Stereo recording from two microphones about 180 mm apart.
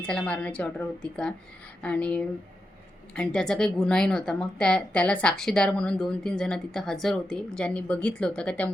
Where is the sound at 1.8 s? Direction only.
5° left (ahead or behind).